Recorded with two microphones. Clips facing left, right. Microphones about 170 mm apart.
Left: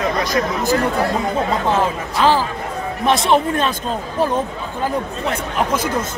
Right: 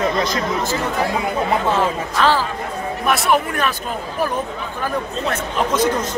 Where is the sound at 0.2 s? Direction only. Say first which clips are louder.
Left 1 dB; 20° right (ahead or behind).